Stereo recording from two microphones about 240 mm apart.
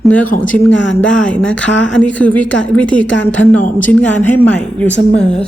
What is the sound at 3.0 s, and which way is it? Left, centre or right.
Speech, left.